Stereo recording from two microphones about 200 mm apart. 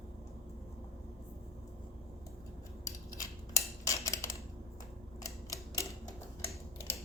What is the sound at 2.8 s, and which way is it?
Cutlery, 15° left (ahead or behind).